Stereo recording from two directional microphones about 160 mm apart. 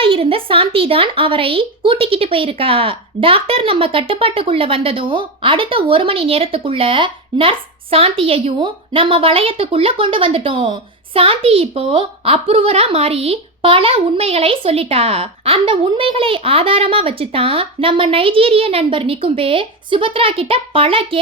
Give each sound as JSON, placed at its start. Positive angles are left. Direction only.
{"t": 0.0, "sound": "a woman's voice", "side_deg": -35}